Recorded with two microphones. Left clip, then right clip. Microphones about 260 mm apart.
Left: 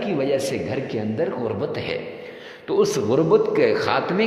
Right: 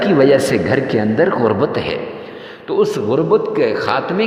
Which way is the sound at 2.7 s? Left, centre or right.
Centre.